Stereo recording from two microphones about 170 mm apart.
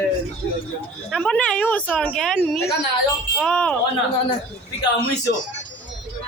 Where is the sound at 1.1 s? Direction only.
5° left (ahead or behind).